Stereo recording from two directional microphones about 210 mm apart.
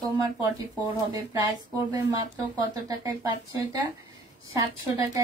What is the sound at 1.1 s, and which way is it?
A woman's voice, 20° right (ahead or behind).